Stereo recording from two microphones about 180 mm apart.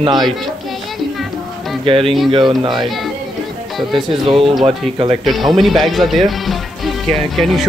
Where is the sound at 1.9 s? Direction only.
30° right (ahead or behind).